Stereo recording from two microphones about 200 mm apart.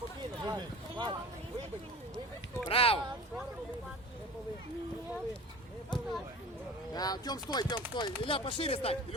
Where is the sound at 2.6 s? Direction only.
30° left (ahead or behind).